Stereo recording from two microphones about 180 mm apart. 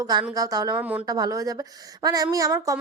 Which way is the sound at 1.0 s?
20° right (ahead or behind).